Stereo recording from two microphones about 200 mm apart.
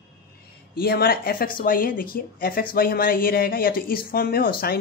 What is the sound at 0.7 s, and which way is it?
Speech, 50° left (ahead or behind).